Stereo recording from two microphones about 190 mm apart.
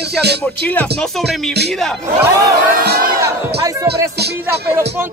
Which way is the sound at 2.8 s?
55° right (ahead or behind).